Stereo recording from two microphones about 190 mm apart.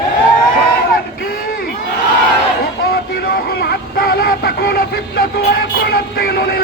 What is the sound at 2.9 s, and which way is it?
Music, 55° left (ahead or behind).